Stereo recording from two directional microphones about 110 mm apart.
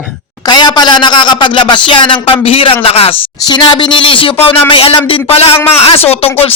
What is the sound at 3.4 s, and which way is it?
Speech, 40° left (ahead or behind).